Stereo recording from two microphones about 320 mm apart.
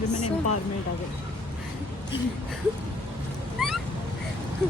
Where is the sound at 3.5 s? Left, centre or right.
Centre.